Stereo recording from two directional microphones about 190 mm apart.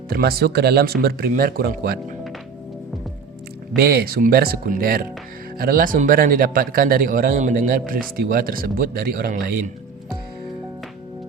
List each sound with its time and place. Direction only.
0.1 s speech: 55° right (ahead or behind)
3.8 s a man's voice: 55° right (ahead or behind)